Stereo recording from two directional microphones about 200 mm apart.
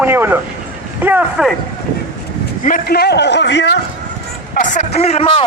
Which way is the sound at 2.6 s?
45° left (ahead or behind).